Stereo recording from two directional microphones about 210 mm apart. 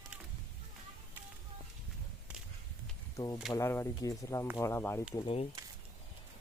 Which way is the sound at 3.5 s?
15° left (ahead or behind).